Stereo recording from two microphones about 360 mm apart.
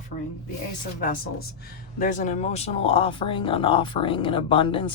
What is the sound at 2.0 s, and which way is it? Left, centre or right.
Speech, centre.